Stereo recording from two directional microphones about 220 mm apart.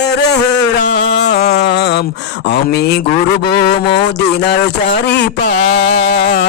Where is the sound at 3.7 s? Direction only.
25° left (ahead or behind).